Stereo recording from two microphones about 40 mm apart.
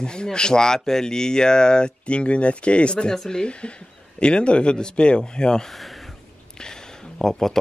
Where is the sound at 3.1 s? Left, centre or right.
Centre.